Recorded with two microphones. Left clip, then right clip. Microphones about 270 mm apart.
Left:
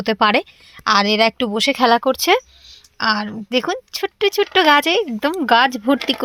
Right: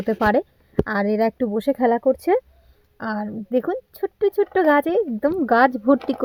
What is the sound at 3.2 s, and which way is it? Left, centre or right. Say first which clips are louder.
Speech: left 3 dB; left.